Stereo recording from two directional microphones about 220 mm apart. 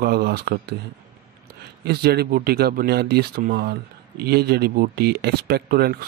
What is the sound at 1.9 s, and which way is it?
Speech, 45° right (ahead or behind).